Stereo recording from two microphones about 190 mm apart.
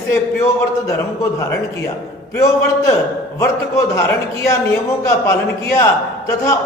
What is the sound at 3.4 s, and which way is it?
Speech, 15° left (ahead or behind).